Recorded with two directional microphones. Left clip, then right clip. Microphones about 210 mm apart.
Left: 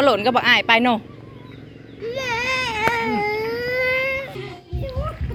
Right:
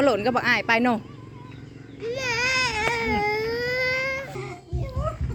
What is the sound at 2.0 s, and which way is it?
Baby cry, 15° left (ahead or behind).